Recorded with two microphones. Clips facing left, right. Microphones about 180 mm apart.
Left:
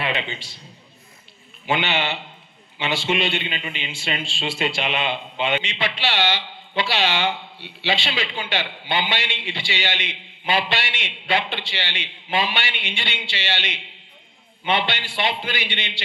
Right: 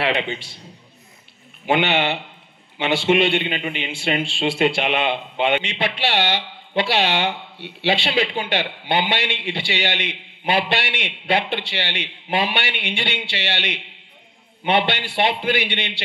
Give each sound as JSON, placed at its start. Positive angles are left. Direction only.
{"t": 0.0, "sound": "a man's voice", "side_deg": -55}
{"t": 1.7, "sound": "a man's voice", "side_deg": -55}